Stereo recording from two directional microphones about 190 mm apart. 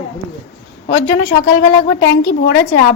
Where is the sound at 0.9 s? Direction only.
85° left.